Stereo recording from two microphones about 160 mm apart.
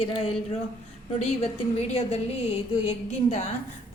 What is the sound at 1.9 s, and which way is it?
A woman's voice, 40° left (ahead or behind).